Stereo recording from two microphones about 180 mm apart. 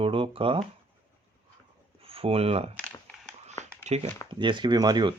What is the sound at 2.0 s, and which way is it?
Speech, 30° right (ahead or behind).